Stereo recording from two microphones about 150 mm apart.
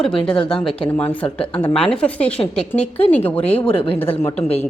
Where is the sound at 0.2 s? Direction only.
35° left (ahead or behind).